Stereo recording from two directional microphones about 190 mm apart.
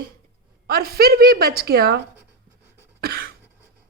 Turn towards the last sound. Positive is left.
turn(degrees=-50)  # may be behind; listen again after turning